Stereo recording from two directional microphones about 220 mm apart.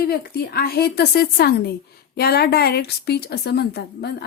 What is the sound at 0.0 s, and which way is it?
A woman's voice, 45° left (ahead or behind).